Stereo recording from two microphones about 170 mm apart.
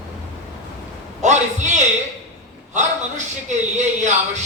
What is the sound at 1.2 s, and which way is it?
Speech, 45° right (ahead or behind).